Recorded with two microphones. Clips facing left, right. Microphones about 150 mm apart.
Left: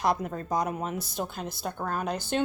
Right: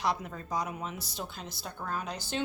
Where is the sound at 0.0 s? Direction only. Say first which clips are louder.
Left 5 dB; 50° left (ahead or behind).